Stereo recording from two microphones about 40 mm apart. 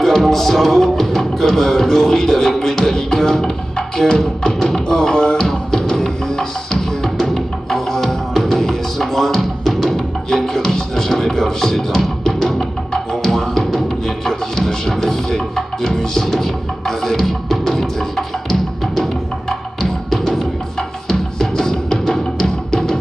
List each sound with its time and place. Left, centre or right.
0.0 s music: centre